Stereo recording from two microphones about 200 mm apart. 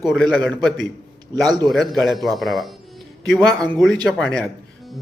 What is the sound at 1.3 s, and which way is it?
Speech, 20° right (ahead or behind).